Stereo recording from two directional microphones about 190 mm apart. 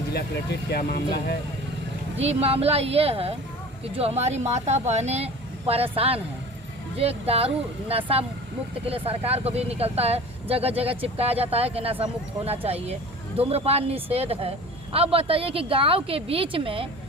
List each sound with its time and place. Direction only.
0.7 s speech: 55° left (ahead or behind)
2.1 s a woman's voice: 30° right (ahead or behind)